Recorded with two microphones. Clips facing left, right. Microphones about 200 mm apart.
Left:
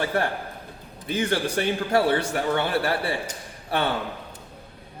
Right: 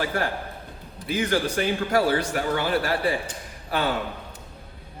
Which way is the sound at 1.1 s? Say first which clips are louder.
Even; 30° left (ahead or behind).